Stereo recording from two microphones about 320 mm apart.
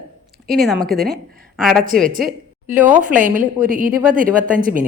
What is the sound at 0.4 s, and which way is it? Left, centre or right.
A woman's voice, centre.